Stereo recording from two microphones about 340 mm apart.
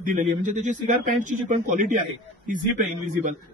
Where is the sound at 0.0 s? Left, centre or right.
Right.